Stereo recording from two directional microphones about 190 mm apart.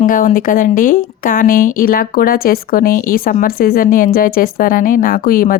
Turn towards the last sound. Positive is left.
turn(degrees=50)  # may be behind; listen again after turning